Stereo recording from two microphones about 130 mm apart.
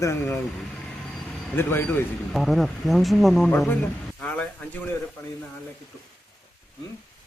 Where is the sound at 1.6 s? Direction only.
15° left (ahead or behind).